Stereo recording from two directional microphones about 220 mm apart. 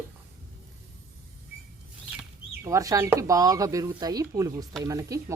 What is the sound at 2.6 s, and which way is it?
Speech, 15° right (ahead or behind).